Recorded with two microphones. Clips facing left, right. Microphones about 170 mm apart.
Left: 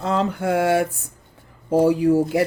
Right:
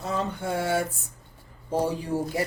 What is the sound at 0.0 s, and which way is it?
Speech, 85° left.